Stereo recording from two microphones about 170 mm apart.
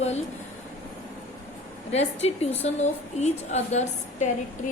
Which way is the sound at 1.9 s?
40° left (ahead or behind).